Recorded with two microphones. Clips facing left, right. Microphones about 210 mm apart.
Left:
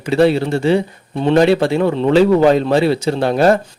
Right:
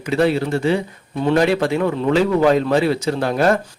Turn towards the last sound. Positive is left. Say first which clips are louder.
# left 4 dB
turn(degrees=30)  # may be behind; listen again after turning